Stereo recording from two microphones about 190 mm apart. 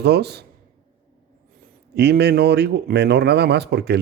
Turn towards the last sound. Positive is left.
turn(degrees=-60)  # may be behind; listen again after turning